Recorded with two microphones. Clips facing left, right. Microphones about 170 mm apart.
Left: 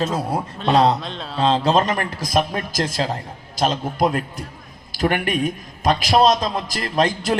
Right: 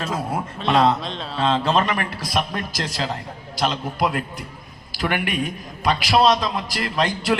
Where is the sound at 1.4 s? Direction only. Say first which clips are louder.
Left 3 dB; 35° left (ahead or behind).